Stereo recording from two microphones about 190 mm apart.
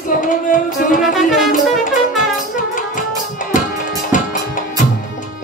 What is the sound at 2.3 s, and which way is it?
Music, 45° left (ahead or behind).